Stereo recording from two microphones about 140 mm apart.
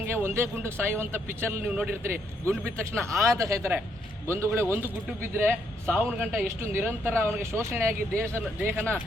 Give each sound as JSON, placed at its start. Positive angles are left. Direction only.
{"t": 0.0, "sound": "a man's voice", "side_deg": -15}